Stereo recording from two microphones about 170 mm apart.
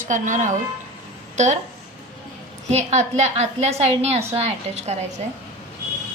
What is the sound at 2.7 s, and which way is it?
A woman's voice, 40° right (ahead or behind).